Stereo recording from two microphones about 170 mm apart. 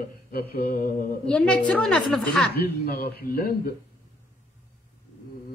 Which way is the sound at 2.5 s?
65° left (ahead or behind).